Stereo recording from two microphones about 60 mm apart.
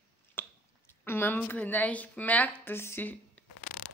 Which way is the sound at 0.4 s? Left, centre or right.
Left.